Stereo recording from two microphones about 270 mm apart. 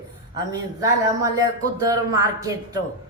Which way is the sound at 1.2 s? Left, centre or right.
Centre.